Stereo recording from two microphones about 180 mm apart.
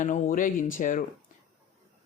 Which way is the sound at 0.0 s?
45° left (ahead or behind).